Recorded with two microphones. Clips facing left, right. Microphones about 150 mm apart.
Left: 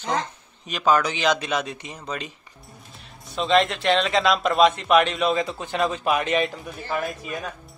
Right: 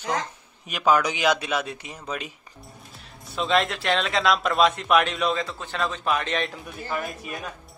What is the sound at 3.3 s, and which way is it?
Speech, centre (ahead or behind).